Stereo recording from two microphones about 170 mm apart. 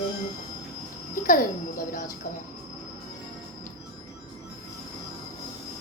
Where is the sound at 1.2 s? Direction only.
55° left (ahead or behind).